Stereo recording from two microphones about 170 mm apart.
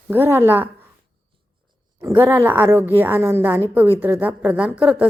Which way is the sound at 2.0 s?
15° right (ahead or behind).